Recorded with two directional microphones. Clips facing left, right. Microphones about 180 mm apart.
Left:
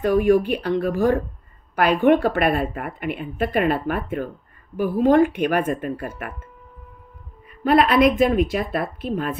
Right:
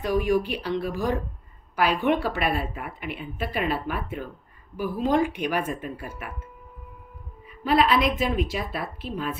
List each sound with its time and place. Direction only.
0.0 s a woman's voice: 55° left (ahead or behind)
7.6 s speech: 55° left (ahead or behind)